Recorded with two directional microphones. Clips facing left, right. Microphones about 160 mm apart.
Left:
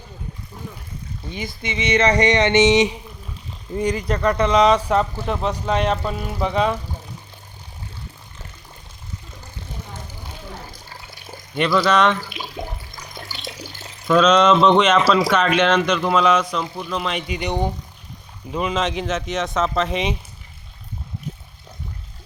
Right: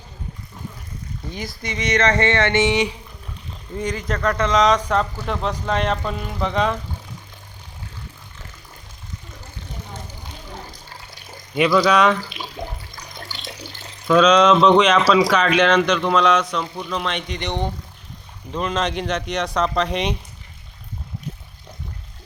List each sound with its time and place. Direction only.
1.5 s speech: 25° left (ahead or behind)
2.0 s speech: 15° left (ahead or behind)
4.1 s speech: 10° left (ahead or behind)
11.5 s speech: 5° right (ahead or behind)
12.6 s speech: 25° left (ahead or behind)
14.1 s speech: 5° left (ahead or behind)